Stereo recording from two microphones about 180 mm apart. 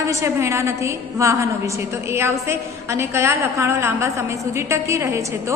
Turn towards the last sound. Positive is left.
turn(degrees=-15)  # may be behind; listen again after turning